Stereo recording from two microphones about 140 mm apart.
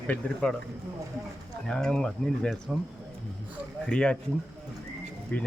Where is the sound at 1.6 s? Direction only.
5° left (ahead or behind).